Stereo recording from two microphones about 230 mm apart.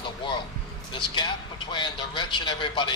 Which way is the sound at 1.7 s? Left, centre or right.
Centre.